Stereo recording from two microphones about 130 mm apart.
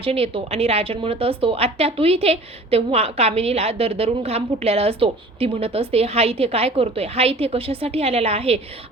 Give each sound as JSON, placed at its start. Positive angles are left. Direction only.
{"t": 0.0, "sound": "a woman's voice", "side_deg": -45}